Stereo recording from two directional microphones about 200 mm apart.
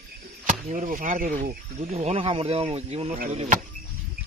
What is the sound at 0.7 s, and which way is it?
Speech, 40° right (ahead or behind).